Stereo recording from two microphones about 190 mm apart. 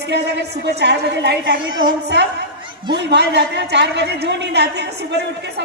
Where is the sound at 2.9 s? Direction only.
65° right (ahead or behind).